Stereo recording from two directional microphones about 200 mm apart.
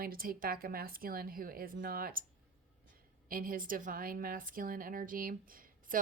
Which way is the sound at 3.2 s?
45° right (ahead or behind).